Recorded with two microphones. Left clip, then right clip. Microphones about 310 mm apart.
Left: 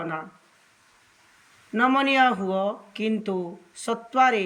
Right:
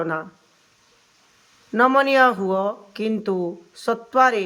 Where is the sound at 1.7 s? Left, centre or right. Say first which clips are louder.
Right 5 dB; centre.